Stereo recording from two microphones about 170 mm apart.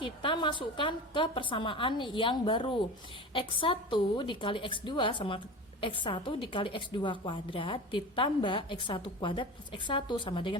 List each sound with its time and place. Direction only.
0.0 s a woman's voice: 30° left (ahead or behind)